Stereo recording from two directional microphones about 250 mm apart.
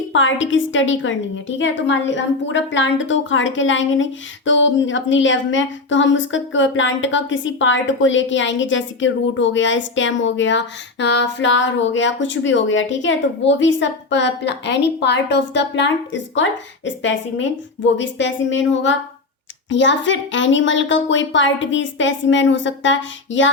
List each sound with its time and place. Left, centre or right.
0.1 s a woman's voice: left